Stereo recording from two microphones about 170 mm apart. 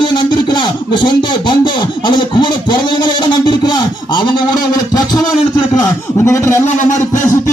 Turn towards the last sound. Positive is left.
turn(degrees=15)  # may be behind; listen again after turning